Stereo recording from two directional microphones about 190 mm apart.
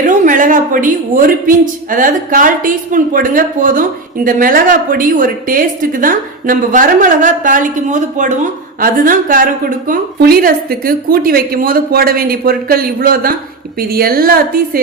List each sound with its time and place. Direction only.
0.0 s a woman's voice: 45° right (ahead or behind)